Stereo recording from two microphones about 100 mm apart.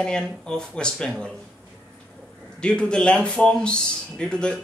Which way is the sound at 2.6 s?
10° left (ahead or behind).